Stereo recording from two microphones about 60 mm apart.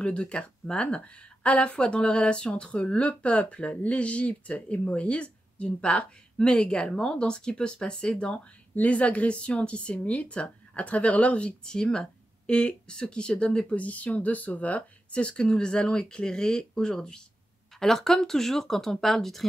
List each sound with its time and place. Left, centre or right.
0.0 s speech: centre